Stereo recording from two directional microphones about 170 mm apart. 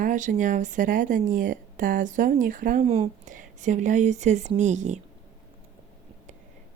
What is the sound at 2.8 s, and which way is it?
A woman's voice, 35° right (ahead or behind).